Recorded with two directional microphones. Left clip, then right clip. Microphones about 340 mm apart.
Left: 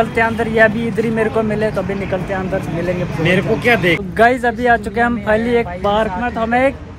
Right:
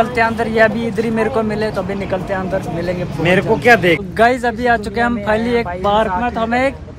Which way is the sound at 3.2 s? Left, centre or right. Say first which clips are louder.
Right 3 dB; centre.